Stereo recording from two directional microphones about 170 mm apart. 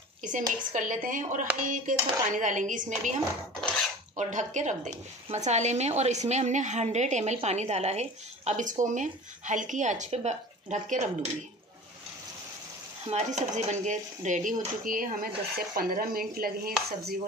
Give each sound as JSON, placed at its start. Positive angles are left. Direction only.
{"t": 0.2, "sound": "a woman's voice", "side_deg": -50}
{"t": 3.6, "sound": "cutlery", "side_deg": 5}
{"t": 4.2, "sound": "a woman's voice", "side_deg": -45}
{"t": 13.1, "sound": "a woman's voice", "side_deg": -40}